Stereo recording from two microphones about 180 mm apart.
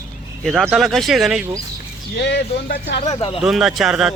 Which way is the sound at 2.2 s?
75° left (ahead or behind).